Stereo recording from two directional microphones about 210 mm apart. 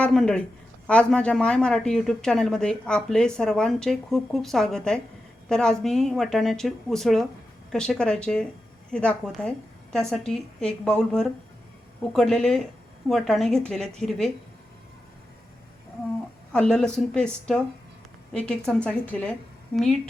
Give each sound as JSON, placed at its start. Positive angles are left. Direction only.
{"t": 0.0, "sound": "a woman's voice", "side_deg": 5}
{"t": 16.5, "sound": "a woman's voice", "side_deg": 5}